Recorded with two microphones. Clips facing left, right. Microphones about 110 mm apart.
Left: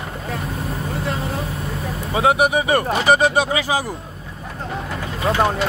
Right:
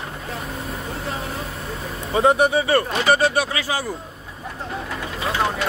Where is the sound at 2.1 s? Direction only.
10° left (ahead or behind).